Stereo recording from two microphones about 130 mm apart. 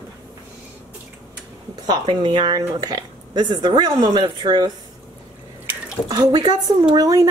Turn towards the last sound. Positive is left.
turn(degrees=-30)  # may be behind; listen again after turning